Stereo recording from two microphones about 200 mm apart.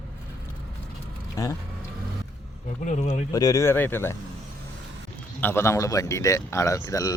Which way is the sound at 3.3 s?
15° left (ahead or behind).